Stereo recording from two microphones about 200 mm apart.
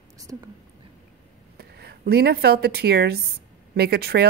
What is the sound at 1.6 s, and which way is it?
Speech, 55° right (ahead or behind).